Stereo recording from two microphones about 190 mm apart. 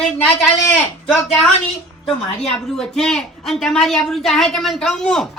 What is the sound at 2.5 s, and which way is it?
Speech, 5° left (ahead or behind).